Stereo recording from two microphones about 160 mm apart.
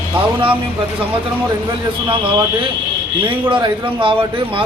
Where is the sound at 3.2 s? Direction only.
30° right (ahead or behind).